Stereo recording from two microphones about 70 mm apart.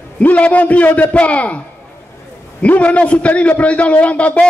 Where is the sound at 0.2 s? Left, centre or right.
Left.